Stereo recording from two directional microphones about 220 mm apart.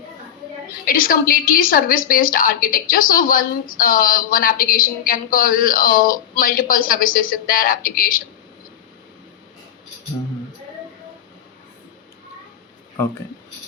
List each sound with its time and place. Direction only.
0.9 s a woman's voice: 40° left (ahead or behind)